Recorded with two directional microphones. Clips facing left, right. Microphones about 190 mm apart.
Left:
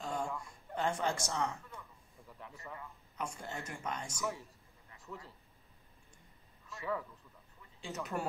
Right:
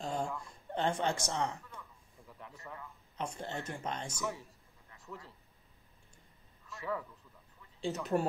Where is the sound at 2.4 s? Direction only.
Centre (ahead or behind).